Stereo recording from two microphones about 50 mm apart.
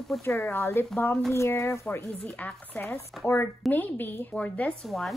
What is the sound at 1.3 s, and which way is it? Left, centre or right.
Speech, left.